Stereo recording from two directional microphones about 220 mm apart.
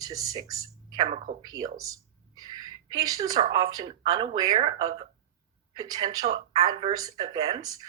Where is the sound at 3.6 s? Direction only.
20° right (ahead or behind).